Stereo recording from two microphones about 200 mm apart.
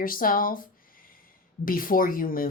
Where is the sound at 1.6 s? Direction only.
45° left (ahead or behind).